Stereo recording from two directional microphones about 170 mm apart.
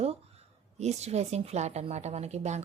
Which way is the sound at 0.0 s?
40° right (ahead or behind).